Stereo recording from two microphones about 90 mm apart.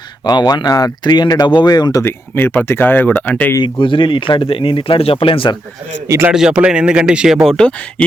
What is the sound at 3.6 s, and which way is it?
Speech, 65° left (ahead or behind).